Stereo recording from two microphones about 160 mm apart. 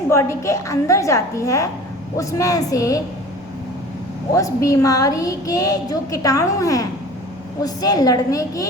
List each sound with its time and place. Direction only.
0.1 s a woman's voice: 15° left (ahead or behind)
4.4 s a woman's voice: 20° left (ahead or behind)